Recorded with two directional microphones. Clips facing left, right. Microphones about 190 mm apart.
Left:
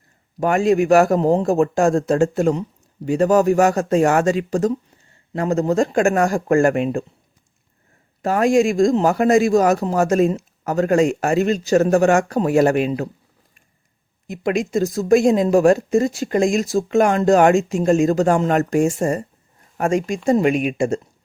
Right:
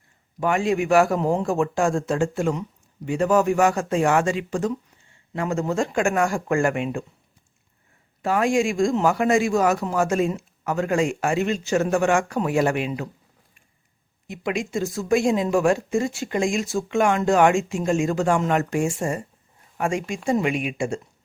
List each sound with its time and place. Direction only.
0.3 s speech: 45° left (ahead or behind)
8.2 s speech: 40° left (ahead or behind)
14.3 s speech: 40° left (ahead or behind)